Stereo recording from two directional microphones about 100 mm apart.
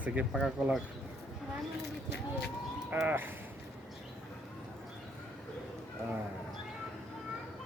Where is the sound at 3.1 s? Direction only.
20° right (ahead or behind).